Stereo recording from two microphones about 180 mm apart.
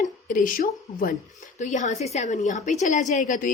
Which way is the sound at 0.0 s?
50° left (ahead or behind).